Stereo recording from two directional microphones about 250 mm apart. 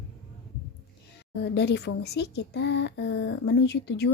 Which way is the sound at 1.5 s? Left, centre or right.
Left.